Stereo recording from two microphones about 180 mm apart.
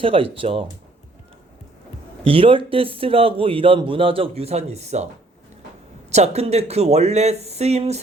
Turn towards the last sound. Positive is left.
turn(degrees=-35)  # may be behind; listen again after turning